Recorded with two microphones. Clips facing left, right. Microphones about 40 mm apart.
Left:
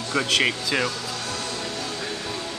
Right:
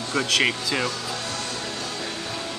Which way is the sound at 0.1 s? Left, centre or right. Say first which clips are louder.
Even; centre.